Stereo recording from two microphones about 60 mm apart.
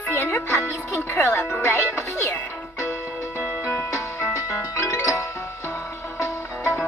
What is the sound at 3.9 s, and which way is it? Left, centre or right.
Music, left.